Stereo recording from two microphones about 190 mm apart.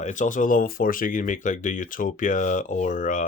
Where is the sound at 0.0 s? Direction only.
40° left (ahead or behind).